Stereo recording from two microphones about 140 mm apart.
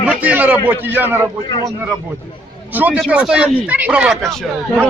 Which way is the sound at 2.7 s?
10° right (ahead or behind).